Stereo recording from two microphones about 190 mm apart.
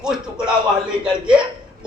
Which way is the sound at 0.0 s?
5° right (ahead or behind).